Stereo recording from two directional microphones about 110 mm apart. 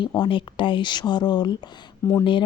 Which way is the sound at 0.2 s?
50° left (ahead or behind).